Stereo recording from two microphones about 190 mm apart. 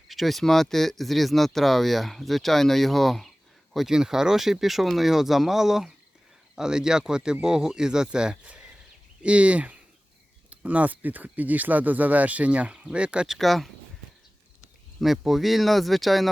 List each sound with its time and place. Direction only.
0.1 s speech: centre (ahead or behind)